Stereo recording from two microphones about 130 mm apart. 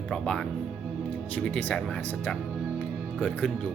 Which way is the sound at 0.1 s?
5° left (ahead or behind).